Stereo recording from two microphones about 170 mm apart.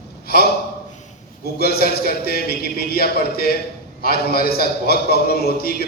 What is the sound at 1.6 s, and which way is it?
A man's voice, 65° left (ahead or behind).